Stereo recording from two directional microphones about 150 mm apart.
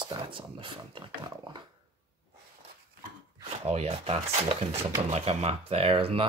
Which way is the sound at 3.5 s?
45° right (ahead or behind).